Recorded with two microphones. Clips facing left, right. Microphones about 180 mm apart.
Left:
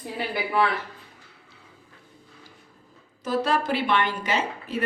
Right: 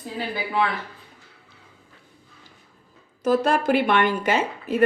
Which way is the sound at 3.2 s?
50° right (ahead or behind).